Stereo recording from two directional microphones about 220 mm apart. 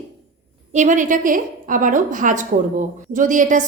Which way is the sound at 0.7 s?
35° right (ahead or behind).